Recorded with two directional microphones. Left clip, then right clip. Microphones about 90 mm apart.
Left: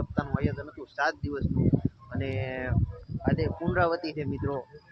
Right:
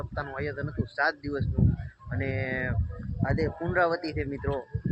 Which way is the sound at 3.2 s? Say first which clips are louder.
Even; 20° right (ahead or behind).